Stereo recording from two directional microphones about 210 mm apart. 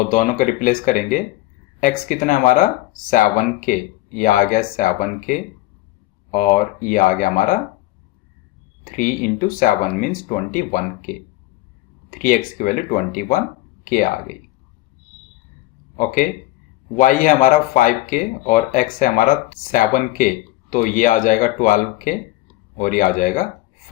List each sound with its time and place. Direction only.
0.1 s speech: 40° left (ahead or behind)
8.8 s speech: 40° left (ahead or behind)
16.9 s speech: 40° left (ahead or behind)